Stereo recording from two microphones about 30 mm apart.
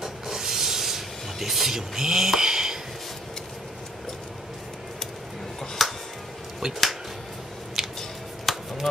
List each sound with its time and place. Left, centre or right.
0.0 s rub: centre
5.8 s music: centre
6.6 s speech: centre
7.8 s squish: centre
8.5 s a sound: centre